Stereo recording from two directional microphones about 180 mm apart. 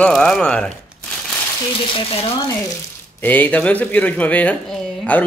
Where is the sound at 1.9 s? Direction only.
30° left (ahead or behind).